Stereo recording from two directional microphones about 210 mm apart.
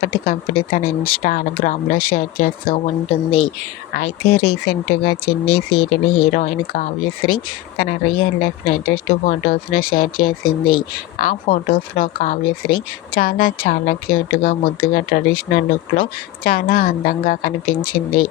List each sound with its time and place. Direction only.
0.0 s speech: 45° left (ahead or behind); by 3.5 s 30° left (ahead or behind)
4.4 s speech: 50° left (ahead or behind)